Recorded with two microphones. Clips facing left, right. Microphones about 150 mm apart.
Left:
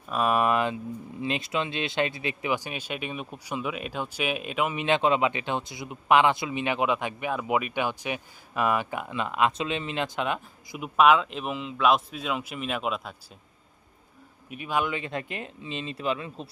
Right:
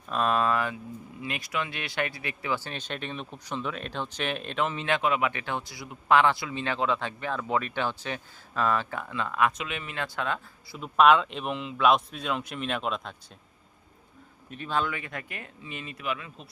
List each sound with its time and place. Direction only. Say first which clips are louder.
0.1 s speech: left 2 dB; 10° left (ahead or behind)
9.5 s speech: left 6 dB; 30° left (ahead or behind); by 13.1 s 5° left (ahead or behind)
14.5 s speech: left 2 dB; 10° left (ahead or behind); by 16.5 s 30° left (ahead or behind)